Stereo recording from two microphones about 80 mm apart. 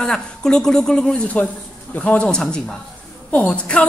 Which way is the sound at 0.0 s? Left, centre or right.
Centre.